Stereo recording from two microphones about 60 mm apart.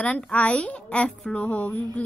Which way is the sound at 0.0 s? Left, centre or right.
Left.